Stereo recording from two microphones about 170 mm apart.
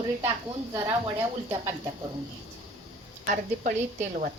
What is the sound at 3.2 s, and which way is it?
A woman's voice, 55° right (ahead or behind).